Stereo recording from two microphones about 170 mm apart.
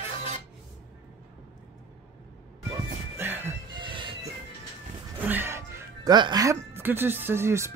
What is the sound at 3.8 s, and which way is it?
Music, 30° right (ahead or behind).